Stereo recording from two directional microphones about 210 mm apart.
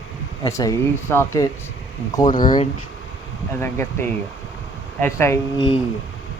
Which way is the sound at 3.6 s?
10° left (ahead or behind).